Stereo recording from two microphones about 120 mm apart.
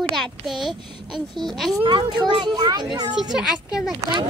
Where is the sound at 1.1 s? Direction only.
35° right (ahead or behind).